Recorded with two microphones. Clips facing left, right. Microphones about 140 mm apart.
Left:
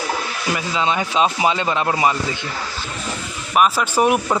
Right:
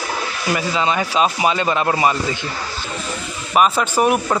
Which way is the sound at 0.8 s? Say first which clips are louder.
Left 1 dB; 15° left (ahead or behind).